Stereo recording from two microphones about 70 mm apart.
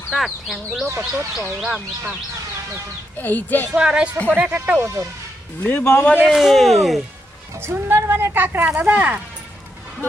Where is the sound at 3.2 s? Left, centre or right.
Left.